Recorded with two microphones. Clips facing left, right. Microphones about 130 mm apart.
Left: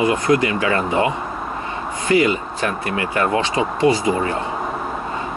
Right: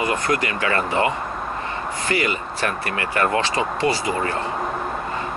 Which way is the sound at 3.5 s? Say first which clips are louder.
Left 3 dB; 5° left (ahead or behind).